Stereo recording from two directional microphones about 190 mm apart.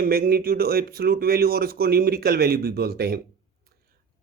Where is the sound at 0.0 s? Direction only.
50° right (ahead or behind).